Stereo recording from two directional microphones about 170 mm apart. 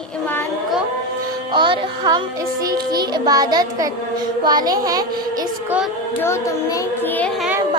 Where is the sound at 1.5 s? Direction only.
30° right (ahead or behind).